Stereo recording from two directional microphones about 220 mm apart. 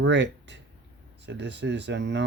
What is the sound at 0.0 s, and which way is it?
Speech, 55° right (ahead or behind).